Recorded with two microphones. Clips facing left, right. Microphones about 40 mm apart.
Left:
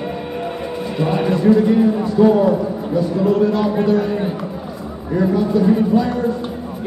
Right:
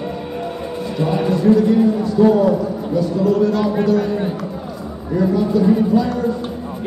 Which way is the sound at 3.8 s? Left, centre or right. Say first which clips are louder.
Even; left.